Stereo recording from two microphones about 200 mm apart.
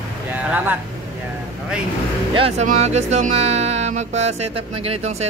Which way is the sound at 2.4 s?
35° right (ahead or behind).